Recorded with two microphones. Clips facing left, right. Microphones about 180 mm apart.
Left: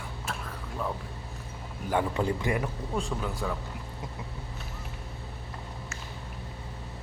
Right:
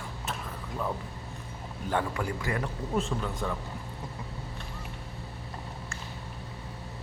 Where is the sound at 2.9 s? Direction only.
Centre (ahead or behind).